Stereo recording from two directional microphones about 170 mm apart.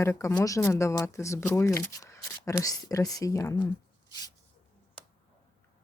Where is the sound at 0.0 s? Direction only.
15° left (ahead or behind).